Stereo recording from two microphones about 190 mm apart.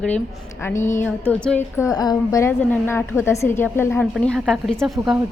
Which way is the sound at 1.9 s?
20° left (ahead or behind).